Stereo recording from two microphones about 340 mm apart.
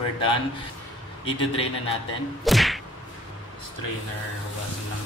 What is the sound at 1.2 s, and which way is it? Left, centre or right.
Speech, centre.